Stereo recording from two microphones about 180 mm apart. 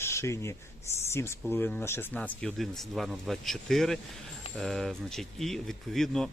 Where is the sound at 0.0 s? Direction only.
15° left (ahead or behind).